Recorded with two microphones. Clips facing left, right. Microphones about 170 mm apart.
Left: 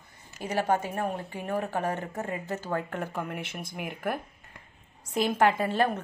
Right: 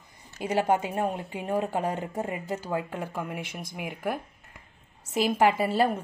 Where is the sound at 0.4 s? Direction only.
15° right (ahead or behind).